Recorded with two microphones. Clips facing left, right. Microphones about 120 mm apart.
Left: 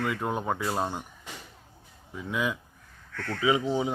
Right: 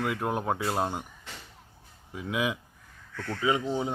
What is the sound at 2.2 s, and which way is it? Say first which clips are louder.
Speech: even; 5° right (ahead or behind).